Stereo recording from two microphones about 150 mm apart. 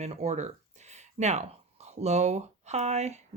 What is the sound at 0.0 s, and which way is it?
Speech, 45° right (ahead or behind).